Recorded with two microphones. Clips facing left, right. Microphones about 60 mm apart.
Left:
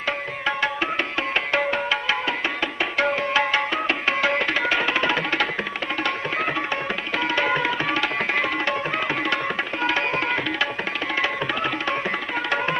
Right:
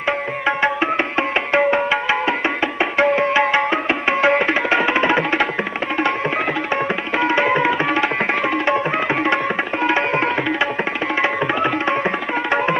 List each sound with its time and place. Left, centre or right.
0.5 s music: right
6.7 s music: right
11.2 s tabla: right